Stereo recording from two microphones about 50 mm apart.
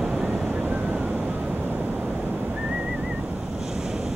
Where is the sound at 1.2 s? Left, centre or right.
Right.